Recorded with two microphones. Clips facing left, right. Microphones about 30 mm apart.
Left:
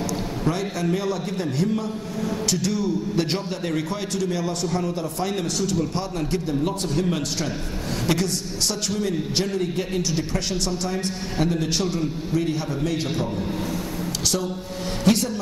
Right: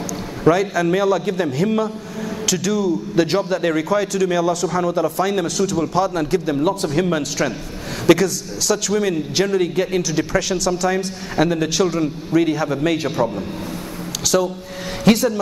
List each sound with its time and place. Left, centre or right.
0.5 s a man's voice: right
8.1 s a man's voice: right
10.9 s a man's voice: right
14.2 s a man's voice: right
15.0 s a man's voice: right